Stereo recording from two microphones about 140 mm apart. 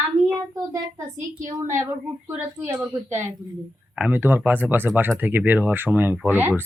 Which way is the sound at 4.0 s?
10° right (ahead or behind).